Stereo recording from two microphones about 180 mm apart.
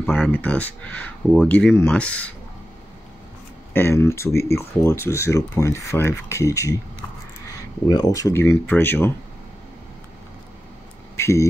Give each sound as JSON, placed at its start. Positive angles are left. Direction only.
{"t": 0.3, "sound": "speech", "side_deg": 10}
{"t": 3.7, "sound": "speech", "side_deg": 15}
{"t": 7.9, "sound": "speech", "side_deg": 20}
{"t": 11.1, "sound": "a sound", "side_deg": 15}